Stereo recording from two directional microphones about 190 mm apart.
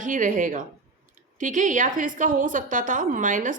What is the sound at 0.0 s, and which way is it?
A woman's voice, 45° right (ahead or behind).